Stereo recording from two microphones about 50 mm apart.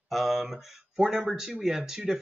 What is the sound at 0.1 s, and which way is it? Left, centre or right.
Speech, centre.